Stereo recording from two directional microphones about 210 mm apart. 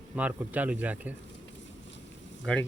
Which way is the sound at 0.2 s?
5° right (ahead or behind).